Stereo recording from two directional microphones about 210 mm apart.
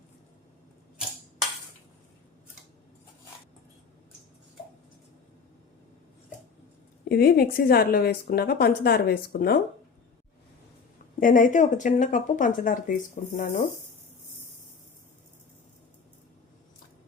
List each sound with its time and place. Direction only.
7.1 s a woman's voice: 45° left (ahead or behind)
11.2 s speech: 40° left (ahead or behind)